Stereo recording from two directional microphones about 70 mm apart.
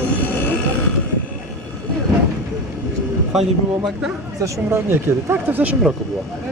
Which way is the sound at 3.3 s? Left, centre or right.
Centre.